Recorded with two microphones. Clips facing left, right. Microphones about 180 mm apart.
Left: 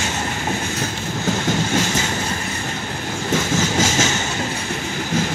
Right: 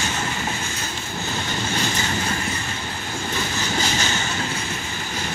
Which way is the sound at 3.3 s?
90° left.